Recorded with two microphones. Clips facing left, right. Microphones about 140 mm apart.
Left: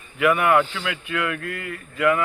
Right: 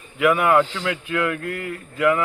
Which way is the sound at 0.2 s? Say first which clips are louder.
Right 1 dB; 10° right (ahead or behind).